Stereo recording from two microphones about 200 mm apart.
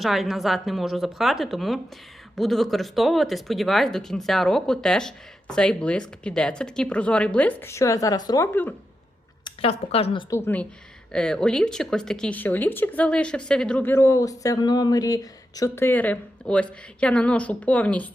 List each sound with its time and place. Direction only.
0.0 s a woman's voice: centre (ahead or behind)
9.4 s a woman's voice: 30° left (ahead or behind); by 18.1 s 5° left (ahead or behind)